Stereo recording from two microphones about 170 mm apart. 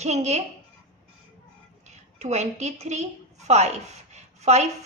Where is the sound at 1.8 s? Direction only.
40° right (ahead or behind).